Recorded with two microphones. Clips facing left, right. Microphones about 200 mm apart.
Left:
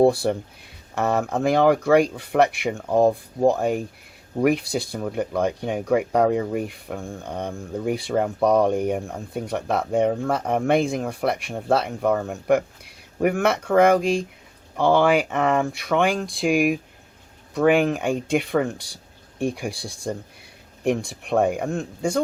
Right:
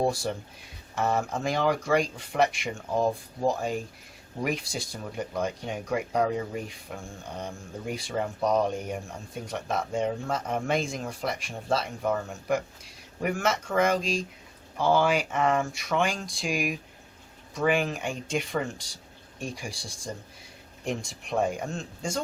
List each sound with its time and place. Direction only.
0.0 s speech: 60° left (ahead or behind)